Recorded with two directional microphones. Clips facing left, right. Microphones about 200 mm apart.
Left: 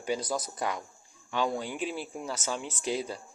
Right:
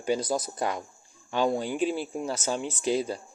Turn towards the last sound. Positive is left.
turn(degrees=-35)  # may be behind; listen again after turning